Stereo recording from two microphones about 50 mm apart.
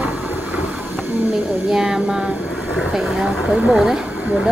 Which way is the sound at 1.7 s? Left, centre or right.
Centre.